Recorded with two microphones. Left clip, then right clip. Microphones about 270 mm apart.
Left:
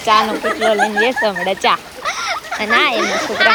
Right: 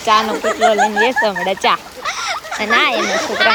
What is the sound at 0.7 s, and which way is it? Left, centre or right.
Speech, right.